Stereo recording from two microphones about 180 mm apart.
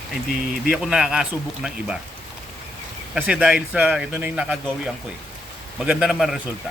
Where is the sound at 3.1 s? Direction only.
5° right (ahead or behind).